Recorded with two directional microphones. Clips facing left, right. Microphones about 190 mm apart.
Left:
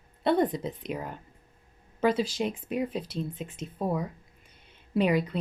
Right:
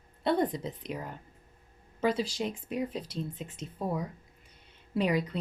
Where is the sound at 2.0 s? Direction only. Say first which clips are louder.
Left 3 dB; 55° left (ahead or behind).